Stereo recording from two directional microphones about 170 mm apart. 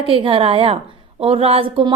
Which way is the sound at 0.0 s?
30° right (ahead or behind).